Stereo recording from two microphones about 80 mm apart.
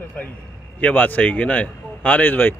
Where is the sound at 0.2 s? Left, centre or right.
Centre.